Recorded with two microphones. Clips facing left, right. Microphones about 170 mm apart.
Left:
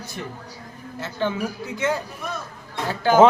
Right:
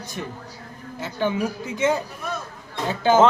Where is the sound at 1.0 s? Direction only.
15° right (ahead or behind).